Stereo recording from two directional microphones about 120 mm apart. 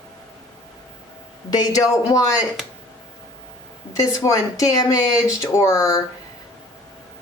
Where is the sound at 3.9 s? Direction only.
30° left (ahead or behind).